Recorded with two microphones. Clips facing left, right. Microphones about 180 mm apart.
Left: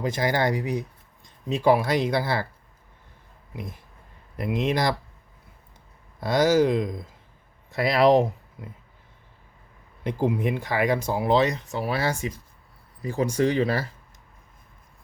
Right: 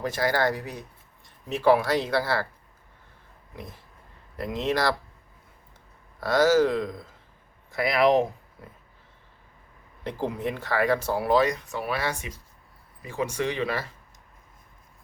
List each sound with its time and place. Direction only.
0.0 s speech: 15° left (ahead or behind)
3.5 s speech: 15° left (ahead or behind)
6.1 s speech: 15° left (ahead or behind); by 8.3 s 35° left (ahead or behind)
8.6 s dog: 15° left (ahead or behind)
10.0 s speech: 15° left (ahead or behind); by 13.8 s 35° left (ahead or behind)